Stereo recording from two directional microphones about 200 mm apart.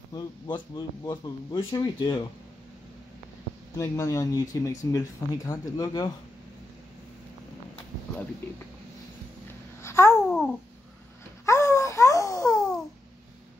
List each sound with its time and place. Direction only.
0.1 s speech: 20° left (ahead or behind)
3.7 s speech: 15° left (ahead or behind)
9.8 s babbling: 15° left (ahead or behind)
10.2 s babbling: centre (ahead or behind)
11.4 s a sound: 15° left (ahead or behind)